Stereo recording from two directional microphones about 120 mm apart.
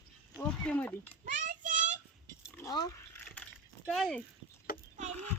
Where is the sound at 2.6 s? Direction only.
30° left (ahead or behind).